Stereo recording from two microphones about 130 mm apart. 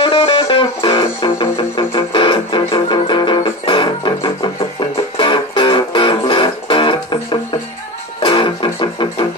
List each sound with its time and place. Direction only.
0.0 s music: 40° left (ahead or behind)